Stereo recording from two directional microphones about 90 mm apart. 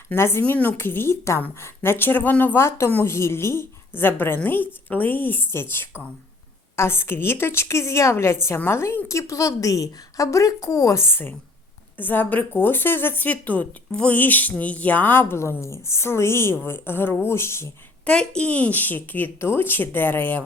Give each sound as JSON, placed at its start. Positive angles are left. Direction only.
{"t": 0.1, "sound": "a woman's voice", "side_deg": 25}
{"t": 18.0, "sound": "a woman's voice", "side_deg": 10}